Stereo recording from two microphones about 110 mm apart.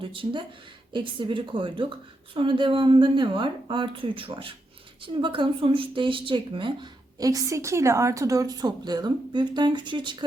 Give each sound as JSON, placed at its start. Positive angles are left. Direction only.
{"t": 0.0, "sound": "a woman's voice", "side_deg": -50}
{"t": 7.2, "sound": "a woman's voice", "side_deg": -30}